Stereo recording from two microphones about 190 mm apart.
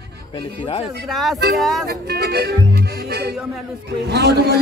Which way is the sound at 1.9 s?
60° right (ahead or behind).